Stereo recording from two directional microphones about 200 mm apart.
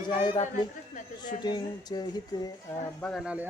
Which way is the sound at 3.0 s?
Centre (ahead or behind).